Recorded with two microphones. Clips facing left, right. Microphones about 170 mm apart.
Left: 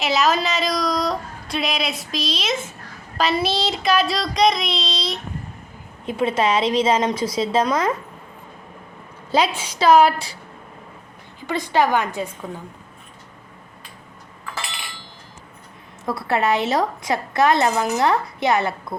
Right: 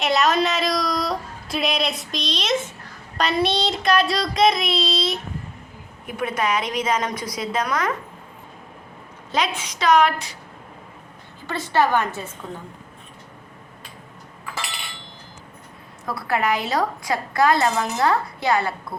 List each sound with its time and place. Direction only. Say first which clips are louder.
0.0 s a woman's voice: even; centre (ahead or behind)
3.2 s child singing: even; centre (ahead or behind)
6.1 s a woman's voice: left 4 dB; 25° left (ahead or behind)
9.3 s a woman's voice: left 4 dB; 30° left (ahead or behind)
11.4 s a woman's voice: left 1 dB; 15° left (ahead or behind)
16.0 s a woman's voice: left 2 dB; 25° left (ahead or behind)